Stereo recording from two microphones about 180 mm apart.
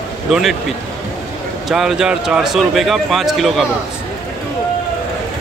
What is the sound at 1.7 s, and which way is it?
Speech, centre (ahead or behind).